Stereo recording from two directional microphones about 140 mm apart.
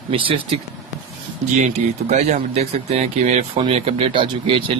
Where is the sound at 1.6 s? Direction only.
60° right (ahead or behind).